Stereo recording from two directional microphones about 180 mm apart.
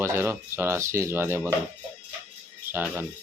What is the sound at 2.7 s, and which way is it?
Speech, 10° right (ahead or behind).